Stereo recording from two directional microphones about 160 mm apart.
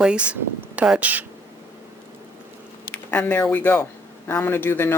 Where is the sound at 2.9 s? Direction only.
10° left (ahead or behind).